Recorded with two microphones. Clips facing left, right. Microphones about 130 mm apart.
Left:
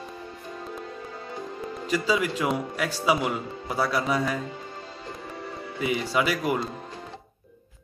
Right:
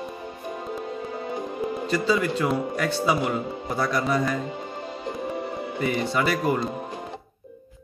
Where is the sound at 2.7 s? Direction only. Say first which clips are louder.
Right 1 dB; 10° left (ahead or behind).